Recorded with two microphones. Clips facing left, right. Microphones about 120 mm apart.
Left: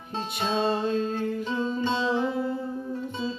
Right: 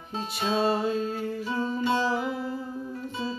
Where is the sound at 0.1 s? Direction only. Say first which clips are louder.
Even; 5° right (ahead or behind).